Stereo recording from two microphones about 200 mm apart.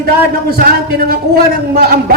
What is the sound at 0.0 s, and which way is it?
Speech, 50° right (ahead or behind).